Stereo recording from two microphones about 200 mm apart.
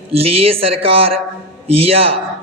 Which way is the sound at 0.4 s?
30° right (ahead or behind).